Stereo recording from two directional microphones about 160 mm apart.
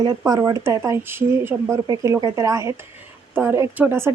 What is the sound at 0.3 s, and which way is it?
Speech, 20° right (ahead or behind).